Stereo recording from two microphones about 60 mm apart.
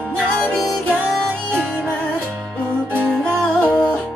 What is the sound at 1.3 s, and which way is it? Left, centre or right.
Music, centre.